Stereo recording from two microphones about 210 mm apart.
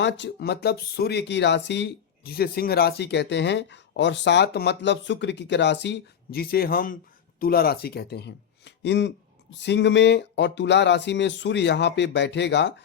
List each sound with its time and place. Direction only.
0.0 s speech: 55° left (ahead or behind)